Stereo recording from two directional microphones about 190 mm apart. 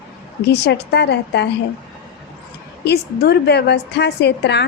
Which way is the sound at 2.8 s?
60° left (ahead or behind).